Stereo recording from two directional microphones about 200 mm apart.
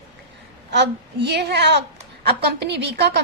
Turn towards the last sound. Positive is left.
turn(degrees=-60)  # may be behind; listen again after turning